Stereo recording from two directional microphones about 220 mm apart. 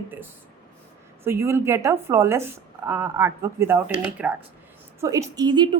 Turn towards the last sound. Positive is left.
turn(degrees=-20)  # may be behind; listen again after turning